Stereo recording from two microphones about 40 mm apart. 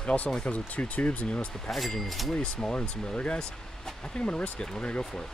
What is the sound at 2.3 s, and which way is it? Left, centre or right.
Speech, left.